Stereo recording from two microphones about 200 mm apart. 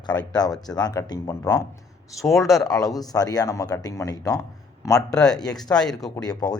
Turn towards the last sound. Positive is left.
turn(degrees=20)  # may be behind; listen again after turning